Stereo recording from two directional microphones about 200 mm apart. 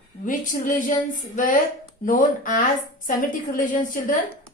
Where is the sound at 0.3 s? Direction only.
45° left (ahead or behind).